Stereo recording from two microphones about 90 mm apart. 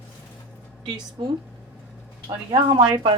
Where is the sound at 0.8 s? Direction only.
65° right (ahead or behind).